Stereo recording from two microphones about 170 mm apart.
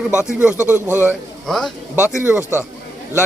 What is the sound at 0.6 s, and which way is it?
Speech, 15° left (ahead or behind).